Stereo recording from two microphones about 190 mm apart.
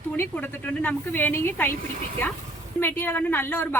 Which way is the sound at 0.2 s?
10° left (ahead or behind).